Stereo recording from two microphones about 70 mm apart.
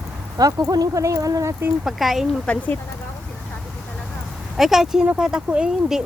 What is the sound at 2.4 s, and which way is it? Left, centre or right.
Speech, left.